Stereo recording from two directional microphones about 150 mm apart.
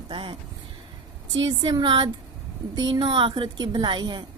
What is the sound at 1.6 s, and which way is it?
A woman's voice, 30° right (ahead or behind).